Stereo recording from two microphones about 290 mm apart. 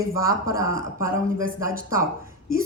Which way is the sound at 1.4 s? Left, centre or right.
Right.